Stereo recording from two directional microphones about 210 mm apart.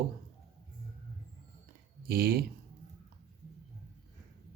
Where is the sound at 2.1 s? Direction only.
45° right (ahead or behind).